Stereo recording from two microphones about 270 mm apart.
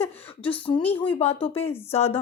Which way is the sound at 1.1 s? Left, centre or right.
Left.